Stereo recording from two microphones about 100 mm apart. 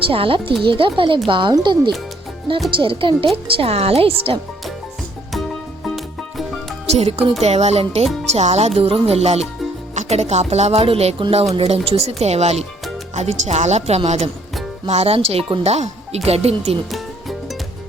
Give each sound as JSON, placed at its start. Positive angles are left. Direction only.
{"t": 0.1, "sound": "speech", "side_deg": -65}
{"t": 3.3, "sound": "speech", "side_deg": -80}
{"t": 5.3, "sound": "music", "side_deg": 0}
{"t": 6.9, "sound": "music", "side_deg": -85}
{"t": 7.4, "sound": "speech", "side_deg": -90}
{"t": 16.9, "sound": "music", "side_deg": 0}